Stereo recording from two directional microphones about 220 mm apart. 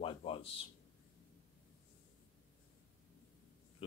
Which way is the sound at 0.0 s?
25° left (ahead or behind).